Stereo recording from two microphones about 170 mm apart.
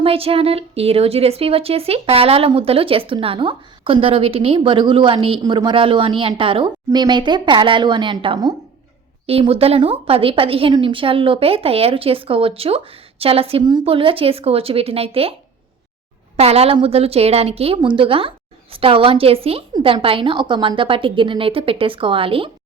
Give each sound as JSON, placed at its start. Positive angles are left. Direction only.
{"t": 0.0, "sound": "a woman's voice", "side_deg": -35}
{"t": 16.4, "sound": "a woman's voice", "side_deg": -35}